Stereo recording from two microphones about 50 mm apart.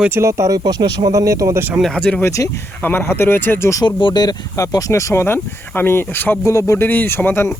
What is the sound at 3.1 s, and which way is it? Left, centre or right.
Speech, left.